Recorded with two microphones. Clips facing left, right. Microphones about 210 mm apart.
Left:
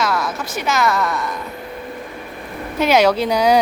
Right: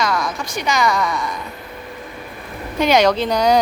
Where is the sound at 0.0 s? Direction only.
5° left (ahead or behind).